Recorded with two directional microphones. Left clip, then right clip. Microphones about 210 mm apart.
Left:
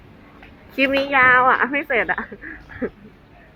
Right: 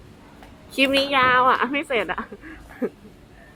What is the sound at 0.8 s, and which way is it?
A woman's voice, 10° right (ahead or behind).